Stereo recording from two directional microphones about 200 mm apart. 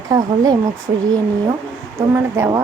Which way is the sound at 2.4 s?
15° right (ahead or behind).